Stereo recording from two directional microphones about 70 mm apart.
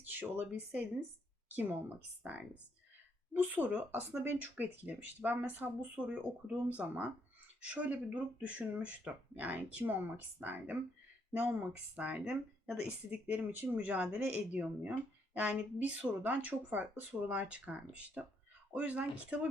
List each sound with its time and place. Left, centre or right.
0.1 s speech: right
6.7 s speech: right